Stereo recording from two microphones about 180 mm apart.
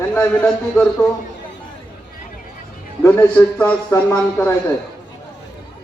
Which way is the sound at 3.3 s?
10° left (ahead or behind).